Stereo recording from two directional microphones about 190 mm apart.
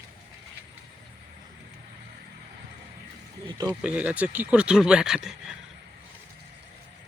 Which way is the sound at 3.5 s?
20° right (ahead or behind).